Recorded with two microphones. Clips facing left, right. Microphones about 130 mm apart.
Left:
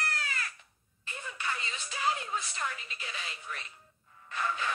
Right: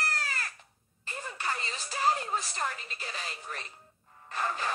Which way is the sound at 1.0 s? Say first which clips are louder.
Right 2 dB; 40° right (ahead or behind).